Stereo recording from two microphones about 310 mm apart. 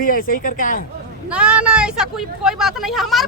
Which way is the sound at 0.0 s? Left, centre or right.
Left.